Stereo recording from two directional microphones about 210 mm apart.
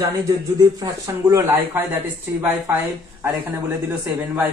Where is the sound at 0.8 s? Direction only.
15° right (ahead or behind).